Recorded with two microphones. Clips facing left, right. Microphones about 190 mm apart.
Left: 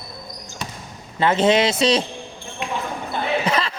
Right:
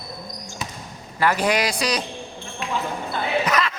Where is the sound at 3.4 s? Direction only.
30° left (ahead or behind).